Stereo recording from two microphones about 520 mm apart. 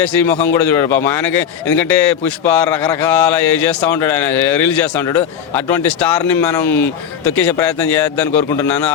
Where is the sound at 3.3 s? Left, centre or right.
Left.